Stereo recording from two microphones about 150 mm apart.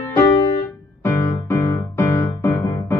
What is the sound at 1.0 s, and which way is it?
Music, 15° left (ahead or behind).